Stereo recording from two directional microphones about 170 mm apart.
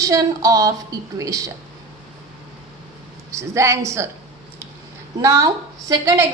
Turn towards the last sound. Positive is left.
turn(degrees=-20)  # may be behind; listen again after turning